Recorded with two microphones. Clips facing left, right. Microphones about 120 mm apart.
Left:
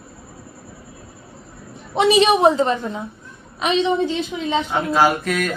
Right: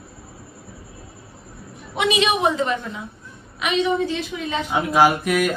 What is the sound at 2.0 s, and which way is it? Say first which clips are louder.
A woman's voice: left 6 dB; 35° left (ahead or behind).